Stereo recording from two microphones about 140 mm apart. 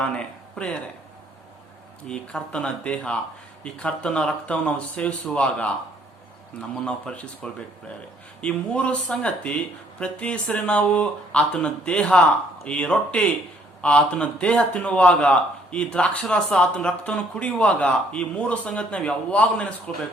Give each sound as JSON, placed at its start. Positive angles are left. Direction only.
{"t": 0.0, "sound": "speech", "side_deg": 5}
{"t": 2.0, "sound": "a man's voice", "side_deg": 5}